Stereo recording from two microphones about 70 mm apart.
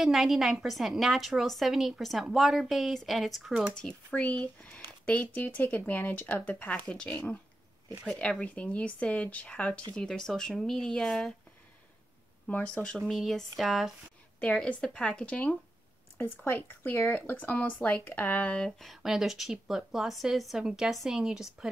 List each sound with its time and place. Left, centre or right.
0.0 s a woman's voice: centre
4.1 s a woman's voice: left
12.4 s a woman's voice: centre
13.1 s a woman's voice: centre
14.4 s a woman's voice: centre
18.8 s a woman's voice: centre